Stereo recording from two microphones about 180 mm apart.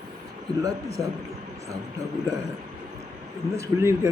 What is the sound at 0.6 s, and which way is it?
Speech, 20° right (ahead or behind).